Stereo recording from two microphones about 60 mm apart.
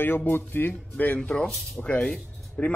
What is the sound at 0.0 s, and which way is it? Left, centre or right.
A man's voice, left.